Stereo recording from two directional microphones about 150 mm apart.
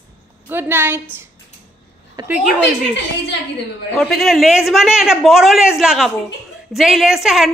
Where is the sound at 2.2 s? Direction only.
25° right (ahead or behind).